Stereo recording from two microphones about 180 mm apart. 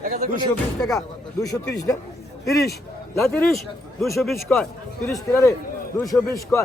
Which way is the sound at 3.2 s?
5° left (ahead or behind).